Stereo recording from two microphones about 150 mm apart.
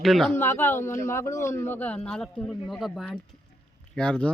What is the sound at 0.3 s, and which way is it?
Speech, 15° left (ahead or behind).